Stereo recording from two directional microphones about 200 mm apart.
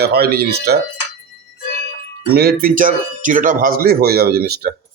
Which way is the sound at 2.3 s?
50° right (ahead or behind).